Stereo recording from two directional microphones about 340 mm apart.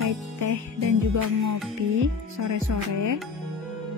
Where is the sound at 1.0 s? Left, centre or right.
Right.